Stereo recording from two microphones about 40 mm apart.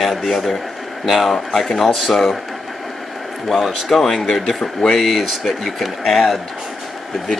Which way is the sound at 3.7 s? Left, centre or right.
Centre.